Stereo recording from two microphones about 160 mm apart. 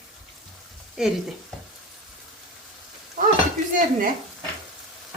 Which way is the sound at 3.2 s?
65° right (ahead or behind).